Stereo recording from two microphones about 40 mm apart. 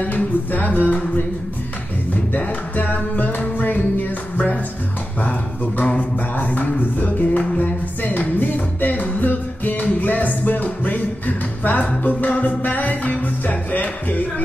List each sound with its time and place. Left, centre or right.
0.0 s music: left
2.3 s music: left
5.9 s music: left